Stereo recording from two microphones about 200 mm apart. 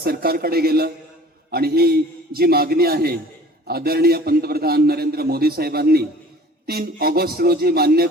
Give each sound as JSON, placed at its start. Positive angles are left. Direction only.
{"t": 0.0, "sound": "a man's voice", "side_deg": -50}